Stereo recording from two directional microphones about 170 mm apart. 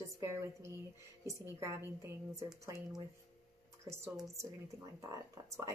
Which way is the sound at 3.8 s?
15° right (ahead or behind).